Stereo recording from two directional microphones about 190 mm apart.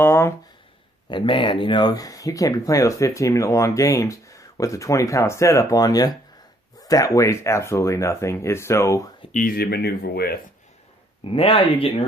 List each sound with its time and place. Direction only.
0.0 s speech: 15° left (ahead or behind)
1.1 s speech: 25° left (ahead or behind)
9.3 s speech: 45° left (ahead or behind)
11.2 s speech: 30° left (ahead or behind)